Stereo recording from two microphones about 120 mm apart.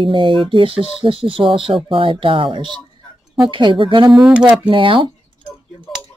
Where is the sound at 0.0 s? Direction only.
45° right (ahead or behind).